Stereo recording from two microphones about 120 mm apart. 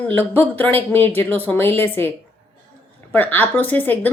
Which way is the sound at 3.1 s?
15° left (ahead or behind).